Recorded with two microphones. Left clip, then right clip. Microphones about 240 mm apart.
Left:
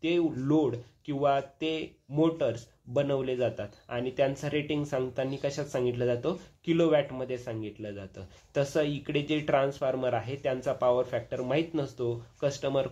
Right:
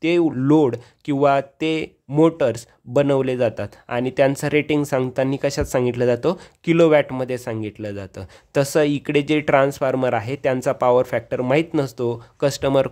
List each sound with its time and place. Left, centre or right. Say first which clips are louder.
0.0 s speech: right 10 dB; right